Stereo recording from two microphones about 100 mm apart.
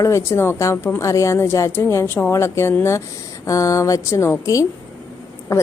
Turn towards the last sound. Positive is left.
turn(degrees=30)  # may be behind; listen again after turning